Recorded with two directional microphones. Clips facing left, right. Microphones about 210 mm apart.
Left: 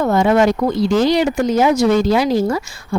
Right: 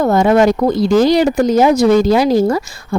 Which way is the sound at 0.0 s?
40° right (ahead or behind).